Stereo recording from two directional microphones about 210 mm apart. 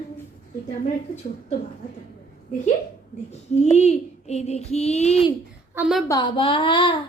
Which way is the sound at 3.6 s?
30° left (ahead or behind).